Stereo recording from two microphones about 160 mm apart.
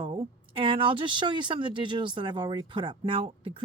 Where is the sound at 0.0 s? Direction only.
35° right (ahead or behind).